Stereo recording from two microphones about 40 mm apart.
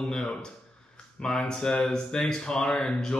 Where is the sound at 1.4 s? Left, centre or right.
Left.